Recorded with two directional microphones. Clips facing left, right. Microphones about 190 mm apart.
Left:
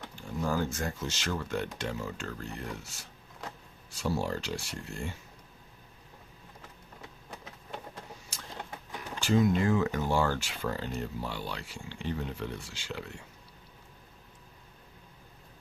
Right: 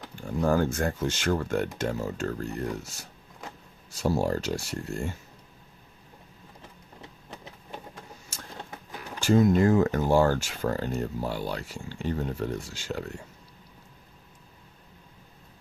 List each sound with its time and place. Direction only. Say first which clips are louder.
0.2 s speech: right 7 dB; 55° right (ahead or behind)
8.3 s a sound: right 3 dB; 45° right (ahead or behind)
9.2 s speech: right 5 dB; 45° right (ahead or behind)